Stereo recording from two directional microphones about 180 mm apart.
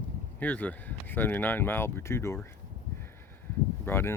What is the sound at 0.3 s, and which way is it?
Speech, 10° left (ahead or behind).